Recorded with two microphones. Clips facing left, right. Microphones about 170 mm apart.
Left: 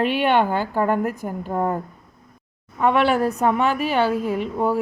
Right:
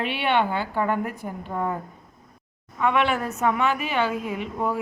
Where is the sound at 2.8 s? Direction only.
35° left (ahead or behind).